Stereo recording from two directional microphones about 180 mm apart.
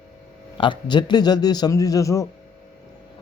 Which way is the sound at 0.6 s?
25° left (ahead or behind).